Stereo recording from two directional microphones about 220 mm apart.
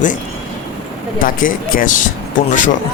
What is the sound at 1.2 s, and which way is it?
Speech, 40° left (ahead or behind).